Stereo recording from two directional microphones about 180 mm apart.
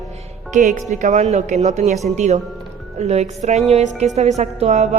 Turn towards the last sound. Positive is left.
turn(degrees=-40)  # may be behind; listen again after turning